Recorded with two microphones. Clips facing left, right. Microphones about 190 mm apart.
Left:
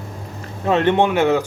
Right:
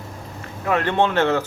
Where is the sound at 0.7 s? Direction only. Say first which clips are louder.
Left 4 dB; 20° left (ahead or behind).